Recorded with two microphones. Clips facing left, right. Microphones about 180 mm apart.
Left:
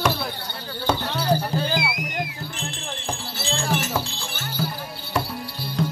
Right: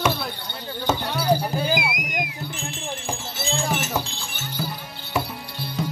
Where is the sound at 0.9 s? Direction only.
10° right (ahead or behind).